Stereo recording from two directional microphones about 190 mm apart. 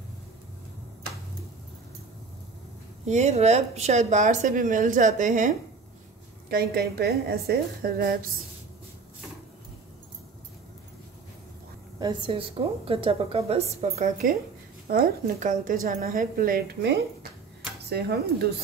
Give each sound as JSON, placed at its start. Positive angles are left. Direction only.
{"t": 3.1, "sound": "speech", "side_deg": -35}
{"t": 6.5, "sound": "a woman's voice", "side_deg": -55}
{"t": 12.0, "sound": "a woman's voice", "side_deg": -25}